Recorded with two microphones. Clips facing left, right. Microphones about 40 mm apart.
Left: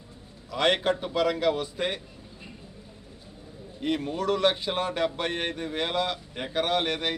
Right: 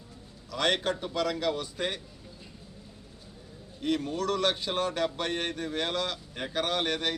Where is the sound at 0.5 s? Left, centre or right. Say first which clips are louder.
Left 4 dB; centre.